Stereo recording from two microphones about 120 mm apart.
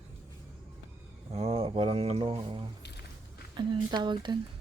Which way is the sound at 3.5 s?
40° right (ahead or behind).